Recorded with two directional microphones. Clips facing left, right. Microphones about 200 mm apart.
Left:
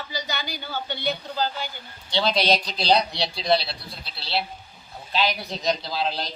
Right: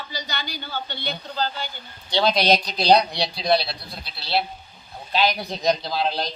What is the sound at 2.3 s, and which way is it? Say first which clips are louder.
Speech: right 2 dB; 15° right (ahead or behind).